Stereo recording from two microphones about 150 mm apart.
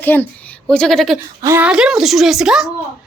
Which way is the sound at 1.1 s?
15° right (ahead or behind).